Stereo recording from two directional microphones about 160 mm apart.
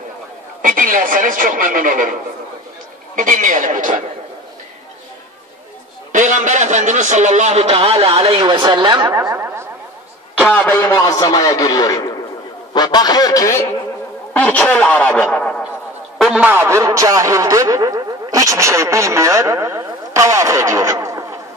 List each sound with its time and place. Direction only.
0.6 s speech: 60° right (ahead or behind)
3.2 s speech: 55° right (ahead or behind)
6.1 s a man's voice: 50° right (ahead or behind); by 9.2 s 30° right (ahead or behind)
9.3 s a sound: 15° right (ahead or behind)
10.5 s a man's voice: 15° left (ahead or behind)
14.3 s speech: 10° left (ahead or behind)
16.2 s a sound: centre (ahead or behind)
16.4 s speech: 15° right (ahead or behind)